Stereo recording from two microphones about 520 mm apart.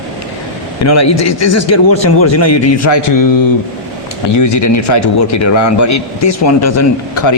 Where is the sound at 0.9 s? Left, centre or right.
Left.